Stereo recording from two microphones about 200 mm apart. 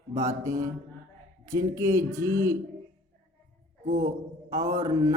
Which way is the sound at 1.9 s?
15° right (ahead or behind).